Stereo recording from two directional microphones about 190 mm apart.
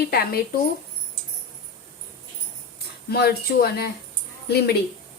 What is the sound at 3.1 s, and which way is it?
A woman's voice, 55° left (ahead or behind).